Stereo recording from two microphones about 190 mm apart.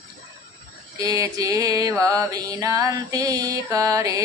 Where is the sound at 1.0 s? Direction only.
20° right (ahead or behind).